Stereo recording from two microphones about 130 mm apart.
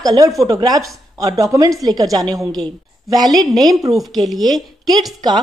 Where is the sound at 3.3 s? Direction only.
Centre (ahead or behind).